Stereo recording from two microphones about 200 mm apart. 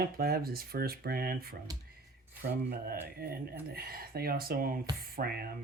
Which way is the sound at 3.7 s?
50° right (ahead or behind).